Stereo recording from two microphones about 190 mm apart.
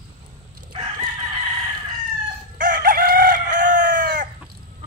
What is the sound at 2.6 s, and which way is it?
Chicken, 45° right (ahead or behind).